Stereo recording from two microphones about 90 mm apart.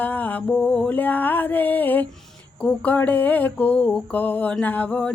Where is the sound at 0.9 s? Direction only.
20° left (ahead or behind).